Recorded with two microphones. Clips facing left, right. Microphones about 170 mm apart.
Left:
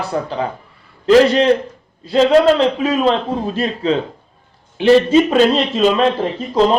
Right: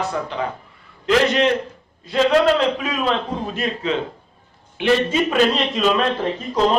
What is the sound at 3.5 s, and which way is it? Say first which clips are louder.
A man's voice: left 4 dB; 35° left (ahead or behind).